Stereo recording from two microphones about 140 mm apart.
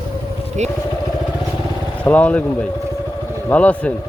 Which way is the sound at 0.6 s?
55° right (ahead or behind).